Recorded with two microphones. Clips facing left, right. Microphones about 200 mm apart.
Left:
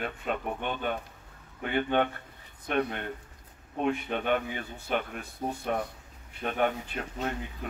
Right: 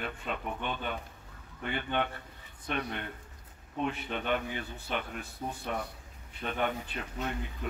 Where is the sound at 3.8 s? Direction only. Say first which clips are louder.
Left 5 dB; 45° left (ahead or behind).